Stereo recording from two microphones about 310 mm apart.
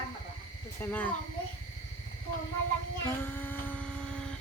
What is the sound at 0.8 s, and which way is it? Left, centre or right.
Speech, centre.